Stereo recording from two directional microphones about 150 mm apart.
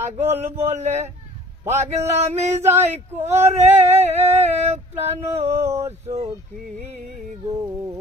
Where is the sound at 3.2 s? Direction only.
45° right (ahead or behind).